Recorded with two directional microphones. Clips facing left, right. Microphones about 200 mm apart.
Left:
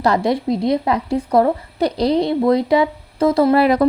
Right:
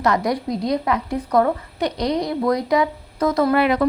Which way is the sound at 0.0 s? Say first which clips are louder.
Left 3 dB; 30° left (ahead or behind).